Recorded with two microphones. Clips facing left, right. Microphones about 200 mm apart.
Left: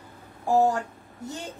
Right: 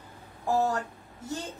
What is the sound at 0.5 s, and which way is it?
Speech, 15° left (ahead or behind).